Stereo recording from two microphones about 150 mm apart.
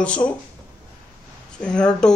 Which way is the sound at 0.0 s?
10° left (ahead or behind).